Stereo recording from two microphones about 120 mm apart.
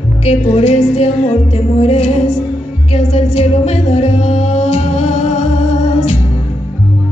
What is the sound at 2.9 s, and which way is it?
Music, 70° left (ahead or behind).